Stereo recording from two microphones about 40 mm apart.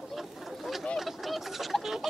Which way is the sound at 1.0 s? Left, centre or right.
Centre.